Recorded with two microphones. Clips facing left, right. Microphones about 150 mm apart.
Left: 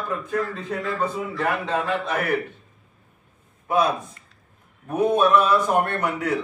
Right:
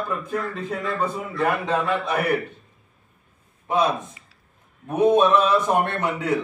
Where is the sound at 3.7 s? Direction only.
20° right (ahead or behind).